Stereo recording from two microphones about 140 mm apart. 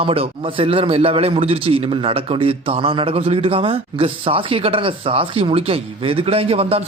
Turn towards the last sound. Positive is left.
turn(degrees=-45)  # may be behind; listen again after turning